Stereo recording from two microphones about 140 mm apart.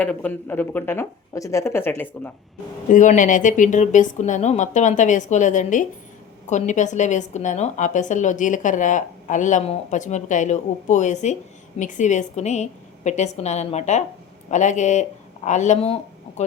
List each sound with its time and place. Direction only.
0.0 s speech: 10° left (ahead or behind)
2.9 s a woman's voice: 65° left (ahead or behind)